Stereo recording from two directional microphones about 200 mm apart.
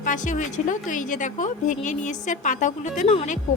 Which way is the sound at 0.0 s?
40° left (ahead or behind).